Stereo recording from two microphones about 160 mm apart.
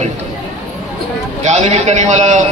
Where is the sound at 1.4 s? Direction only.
45° right (ahead or behind).